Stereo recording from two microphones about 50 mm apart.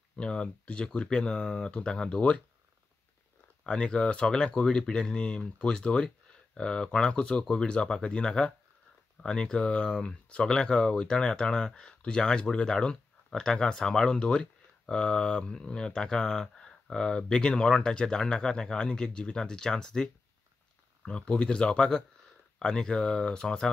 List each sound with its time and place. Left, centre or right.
0.1 s speech: left
3.6 s speech: centre
21.1 s speech: centre